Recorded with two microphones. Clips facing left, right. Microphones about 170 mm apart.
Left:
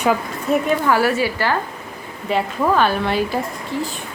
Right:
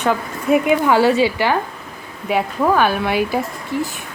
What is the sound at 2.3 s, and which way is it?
A woman's voice, 5° right (ahead or behind).